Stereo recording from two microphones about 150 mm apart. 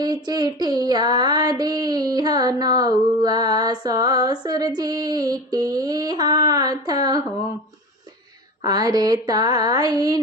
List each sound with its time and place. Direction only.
0.0 s female singing: 30° right (ahead or behind)
8.6 s female singing: 25° right (ahead or behind)